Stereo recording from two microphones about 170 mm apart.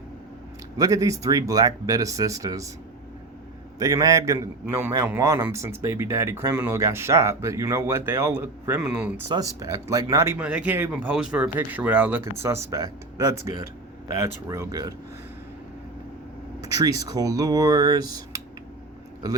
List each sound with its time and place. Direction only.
0.8 s speech: 20° right (ahead or behind)
3.8 s a man's voice: 20° right (ahead or behind)
9.3 s a man's voice: 20° right (ahead or behind)
16.6 s speech: 20° right (ahead or behind)